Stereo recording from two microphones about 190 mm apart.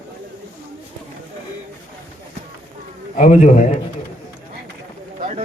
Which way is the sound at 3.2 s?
40° left (ahead or behind).